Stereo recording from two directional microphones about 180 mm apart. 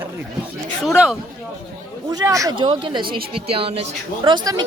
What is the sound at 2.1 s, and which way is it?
A woman's voice, 20° right (ahead or behind).